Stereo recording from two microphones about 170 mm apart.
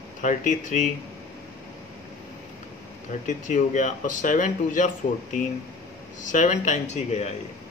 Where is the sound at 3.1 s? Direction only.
45° left (ahead or behind).